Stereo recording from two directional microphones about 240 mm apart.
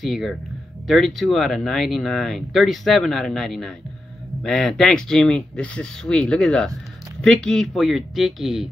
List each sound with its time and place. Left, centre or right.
0.0 s speech: centre